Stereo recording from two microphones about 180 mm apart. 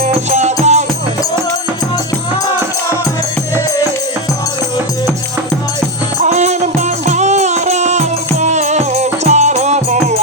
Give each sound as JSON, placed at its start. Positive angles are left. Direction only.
{"t": 0.0, "sound": "music", "side_deg": -35}
{"t": 6.2, "sound": "music", "side_deg": -40}